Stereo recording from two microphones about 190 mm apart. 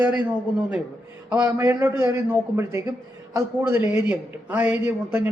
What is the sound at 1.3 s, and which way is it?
A man's voice, 10° right (ahead or behind).